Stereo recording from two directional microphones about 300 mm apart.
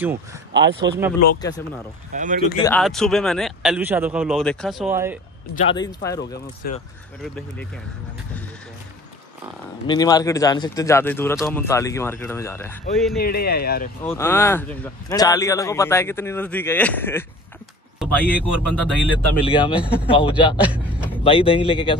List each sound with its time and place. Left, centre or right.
0.0 s speech: centre
0.5 s speech: right
2.1 s speech: right
2.6 s a man's voice: centre
5.6 s speech: centre
6.6 s speech: left
9.8 s speech: centre
13.2 s speech: left
14.0 s a man's voice: centre
19.4 s speech: centre
19.7 s a man's voice: centre
20.1 s speech: centre